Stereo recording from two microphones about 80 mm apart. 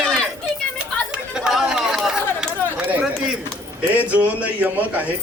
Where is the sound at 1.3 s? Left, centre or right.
Centre.